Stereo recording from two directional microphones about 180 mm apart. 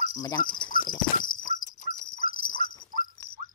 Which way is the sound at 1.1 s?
50° left (ahead or behind).